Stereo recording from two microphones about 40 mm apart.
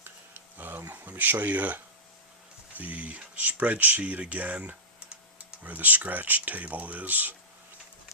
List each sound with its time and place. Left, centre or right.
0.5 s a sound: right
0.9 s speech: right
4.5 s typing: right
5.6 s speech: right